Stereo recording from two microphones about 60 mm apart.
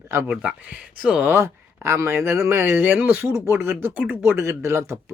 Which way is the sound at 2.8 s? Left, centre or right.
Right.